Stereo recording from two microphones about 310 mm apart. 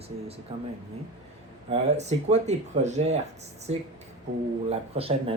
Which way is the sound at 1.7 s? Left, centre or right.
Right.